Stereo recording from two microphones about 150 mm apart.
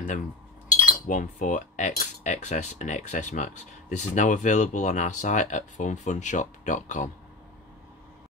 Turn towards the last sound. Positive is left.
turn(degrees=55)  # may be behind; listen again after turning